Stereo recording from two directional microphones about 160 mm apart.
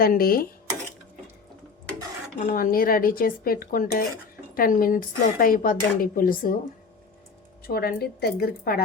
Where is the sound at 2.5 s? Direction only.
65° left (ahead or behind).